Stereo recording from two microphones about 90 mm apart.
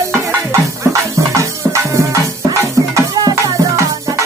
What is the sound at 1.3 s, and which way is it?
Music, 35° right (ahead or behind).